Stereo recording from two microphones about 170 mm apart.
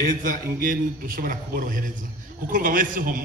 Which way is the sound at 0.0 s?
55° right (ahead or behind).